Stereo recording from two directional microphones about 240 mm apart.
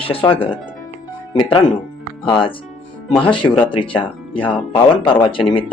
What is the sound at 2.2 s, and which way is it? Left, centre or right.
Speech, left.